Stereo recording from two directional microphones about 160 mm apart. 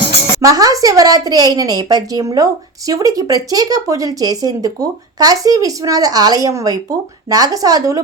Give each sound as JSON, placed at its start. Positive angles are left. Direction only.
{"t": 0.4, "sound": "a woman's voice", "side_deg": -20}